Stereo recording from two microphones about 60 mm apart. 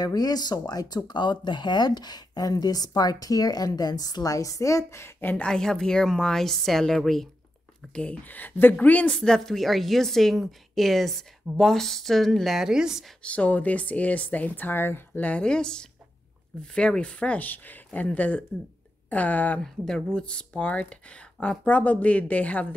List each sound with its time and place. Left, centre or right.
0.0 s a woman's voice: left
2.3 s a woman's voice: left
5.4 s a woman's voice: centre
7.9 s speech: centre
8.3 s a woman's voice: left
9.1 s a woman's voice: centre
13.2 s speech: left
15.2 s a woman's voice: centre
19.6 s speech: centre; by 22.8 s left